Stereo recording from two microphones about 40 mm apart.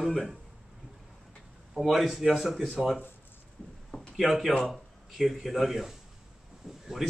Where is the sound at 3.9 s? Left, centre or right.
Left.